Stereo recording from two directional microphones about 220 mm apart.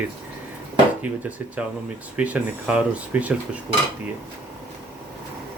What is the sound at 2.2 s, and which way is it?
Speech, 5° right (ahead or behind).